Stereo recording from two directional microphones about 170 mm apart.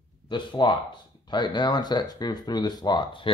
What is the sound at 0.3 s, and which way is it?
Speech, 25° left (ahead or behind).